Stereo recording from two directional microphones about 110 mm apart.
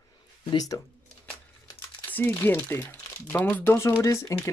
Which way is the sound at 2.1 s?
20° left (ahead or behind).